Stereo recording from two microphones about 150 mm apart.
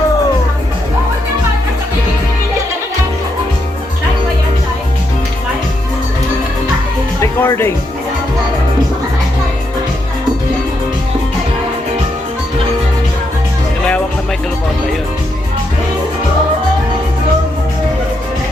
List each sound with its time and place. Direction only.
7.2 s music: 15° left (ahead or behind)